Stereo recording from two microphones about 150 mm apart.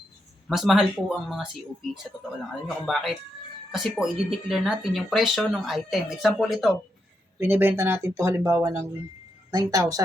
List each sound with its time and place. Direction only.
0.4 s speech: centre (ahead or behind)
2.6 s speech: centre (ahead or behind)
7.3 s speech: 15° right (ahead or behind)